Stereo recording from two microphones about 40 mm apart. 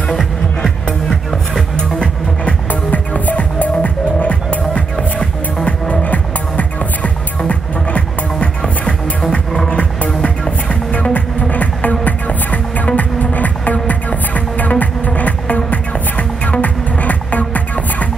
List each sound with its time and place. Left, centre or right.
2.4 s music: left
4.9 s music: centre
5.7 s music: left